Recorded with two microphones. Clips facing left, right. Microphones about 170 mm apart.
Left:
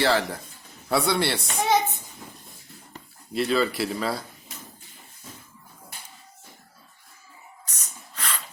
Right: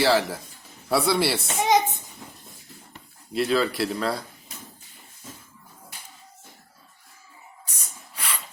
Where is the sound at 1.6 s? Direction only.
15° right (ahead or behind).